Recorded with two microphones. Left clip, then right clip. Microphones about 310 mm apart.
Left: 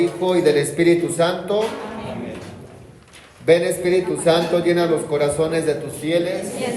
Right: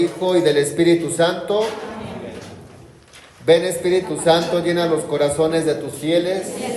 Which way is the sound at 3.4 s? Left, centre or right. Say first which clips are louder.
Right 1 dB; right.